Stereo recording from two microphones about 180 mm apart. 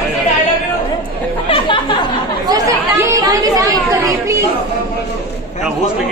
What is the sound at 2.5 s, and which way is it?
Chatter, 15° right (ahead or behind).